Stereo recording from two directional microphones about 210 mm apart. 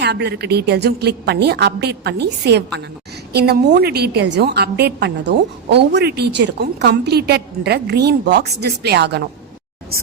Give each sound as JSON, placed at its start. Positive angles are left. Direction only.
{"t": 0.0, "sound": "a woman's voice", "side_deg": -50}